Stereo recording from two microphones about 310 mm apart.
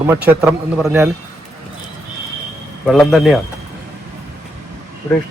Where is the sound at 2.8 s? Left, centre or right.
Centre.